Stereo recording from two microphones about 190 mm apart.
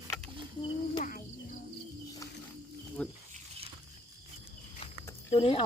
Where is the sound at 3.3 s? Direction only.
30° right (ahead or behind).